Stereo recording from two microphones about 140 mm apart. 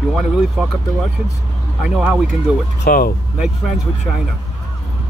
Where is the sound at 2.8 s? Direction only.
90° left.